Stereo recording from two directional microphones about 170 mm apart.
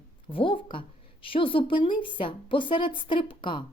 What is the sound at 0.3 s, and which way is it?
A woman's voice, 30° left (ahead or behind).